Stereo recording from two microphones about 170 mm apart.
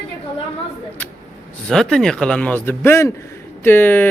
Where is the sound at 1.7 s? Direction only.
5° left (ahead or behind).